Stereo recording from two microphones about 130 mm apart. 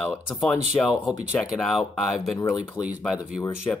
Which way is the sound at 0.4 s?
Centre (ahead or behind).